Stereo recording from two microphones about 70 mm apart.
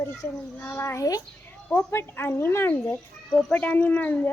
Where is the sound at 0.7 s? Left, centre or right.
Left.